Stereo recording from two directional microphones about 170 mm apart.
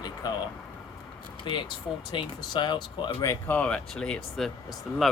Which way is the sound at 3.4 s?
10° left (ahead or behind).